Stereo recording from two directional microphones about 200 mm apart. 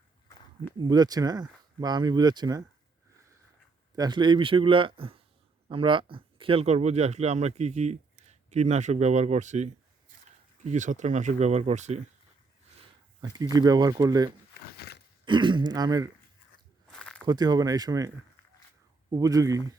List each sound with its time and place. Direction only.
0.8 s speech: 20° right (ahead or behind)
3.9 s speech: 20° right (ahead or behind)
13.2 s speech: 20° right (ahead or behind)
14.8 s a sound: 55° left (ahead or behind)
15.2 s speech: 25° right (ahead or behind)
16.9 s a sound: 5° left (ahead or behind)
17.2 s speech: 20° right (ahead or behind)
19.1 s speech: 15° right (ahead or behind)